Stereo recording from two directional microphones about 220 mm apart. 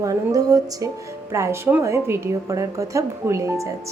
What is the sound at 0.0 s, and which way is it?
Speech, 15° right (ahead or behind).